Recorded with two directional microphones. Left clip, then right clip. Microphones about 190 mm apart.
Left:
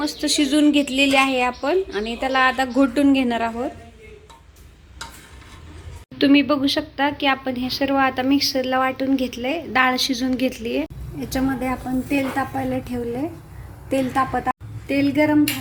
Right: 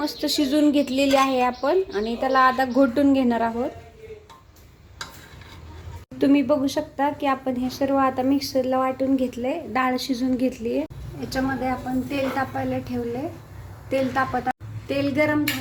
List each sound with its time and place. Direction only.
0.0 s a woman's voice: 5° right (ahead or behind)
6.1 s a woman's voice: 5° right (ahead or behind)
12.1 s a woman's voice: 15° left (ahead or behind)
14.9 s a woman's voice: 5° left (ahead or behind)